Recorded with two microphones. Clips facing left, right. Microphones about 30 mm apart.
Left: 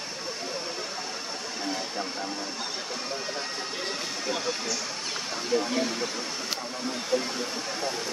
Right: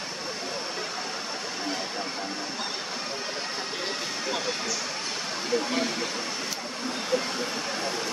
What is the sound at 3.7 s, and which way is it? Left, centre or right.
Speech, centre.